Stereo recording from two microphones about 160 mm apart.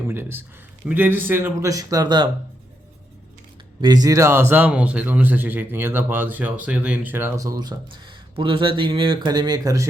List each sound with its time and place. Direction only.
0.1 s a man's voice: 15° right (ahead or behind)
3.8 s a man's voice: 25° right (ahead or behind)